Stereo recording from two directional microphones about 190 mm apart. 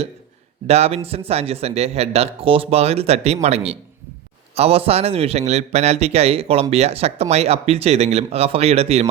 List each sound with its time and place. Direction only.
0.7 s a man's voice: 35° right (ahead or behind)